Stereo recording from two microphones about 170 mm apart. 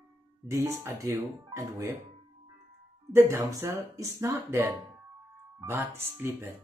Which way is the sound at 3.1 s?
15° right (ahead or behind).